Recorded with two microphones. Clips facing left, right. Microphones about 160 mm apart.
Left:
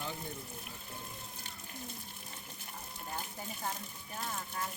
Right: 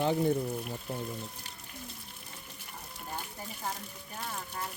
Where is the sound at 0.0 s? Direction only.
60° right (ahead or behind).